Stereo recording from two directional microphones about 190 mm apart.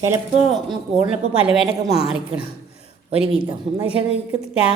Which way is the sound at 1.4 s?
Centre (ahead or behind).